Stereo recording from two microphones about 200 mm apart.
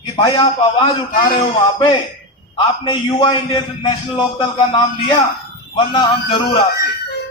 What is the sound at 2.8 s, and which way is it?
A man's voice, 25° left (ahead or behind).